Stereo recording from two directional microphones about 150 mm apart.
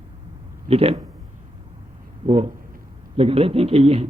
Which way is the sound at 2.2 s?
40° right (ahead or behind).